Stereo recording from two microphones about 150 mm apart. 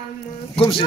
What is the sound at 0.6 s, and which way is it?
Speech, 35° left (ahead or behind).